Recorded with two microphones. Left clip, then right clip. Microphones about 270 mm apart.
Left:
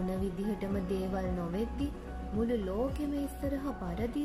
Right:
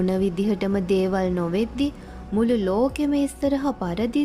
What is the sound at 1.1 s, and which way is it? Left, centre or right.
A woman's voice, right.